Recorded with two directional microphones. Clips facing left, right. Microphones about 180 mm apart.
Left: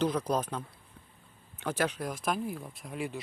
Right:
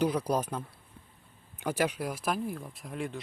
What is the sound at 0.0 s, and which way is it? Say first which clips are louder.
Speech: right 1 dB; 10° right (ahead or behind).